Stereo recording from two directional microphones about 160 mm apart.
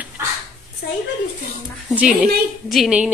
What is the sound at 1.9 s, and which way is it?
A woman's voice, 5° right (ahead or behind).